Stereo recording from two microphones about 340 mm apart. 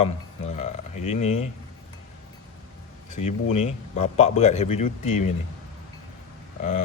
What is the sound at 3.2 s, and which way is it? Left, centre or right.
Speech, centre.